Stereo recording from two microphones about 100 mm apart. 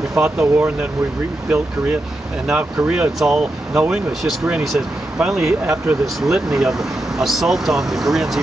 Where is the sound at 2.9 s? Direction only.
10° right (ahead or behind).